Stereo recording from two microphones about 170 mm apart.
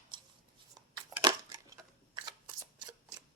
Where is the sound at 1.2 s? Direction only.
20° right (ahead or behind).